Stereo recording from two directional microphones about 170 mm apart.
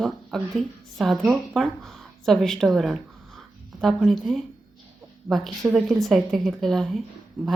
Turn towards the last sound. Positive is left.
turn(degrees=5)  # may be behind; listen again after turning